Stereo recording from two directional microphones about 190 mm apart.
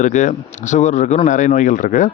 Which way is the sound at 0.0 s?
40° left (ahead or behind).